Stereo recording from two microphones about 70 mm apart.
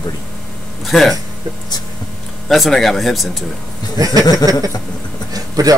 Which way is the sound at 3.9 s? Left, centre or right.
Right.